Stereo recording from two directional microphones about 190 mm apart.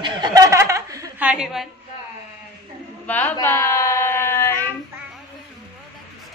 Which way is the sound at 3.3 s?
15° left (ahead or behind).